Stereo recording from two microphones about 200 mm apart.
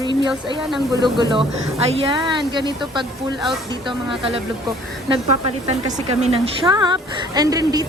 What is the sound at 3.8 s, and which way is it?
Speech, 25° right (ahead or behind).